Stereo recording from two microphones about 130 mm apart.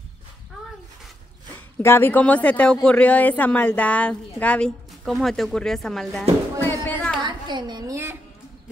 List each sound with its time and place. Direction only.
1.8 s speech: 15° left (ahead or behind); by 6.2 s centre (ahead or behind)
6.6 s a sound: 15° left (ahead or behind)
7.2 s a child's voice: 35° right (ahead or behind)
7.9 s a woman's voice: 20° right (ahead or behind)